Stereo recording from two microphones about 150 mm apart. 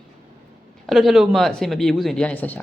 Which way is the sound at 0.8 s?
Centre (ahead or behind).